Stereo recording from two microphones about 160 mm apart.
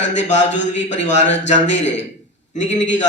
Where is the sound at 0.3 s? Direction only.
45° left (ahead or behind).